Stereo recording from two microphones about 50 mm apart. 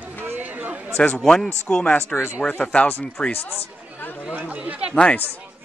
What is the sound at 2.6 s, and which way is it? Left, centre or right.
Speech, left.